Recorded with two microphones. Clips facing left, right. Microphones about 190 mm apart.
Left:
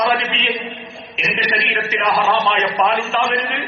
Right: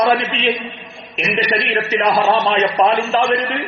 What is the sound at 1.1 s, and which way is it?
Music, centre (ahead or behind).